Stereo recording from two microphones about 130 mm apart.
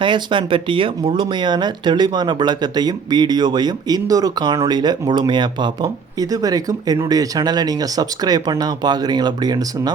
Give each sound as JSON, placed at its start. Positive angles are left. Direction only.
{"t": 0.0, "sound": "speech", "side_deg": -40}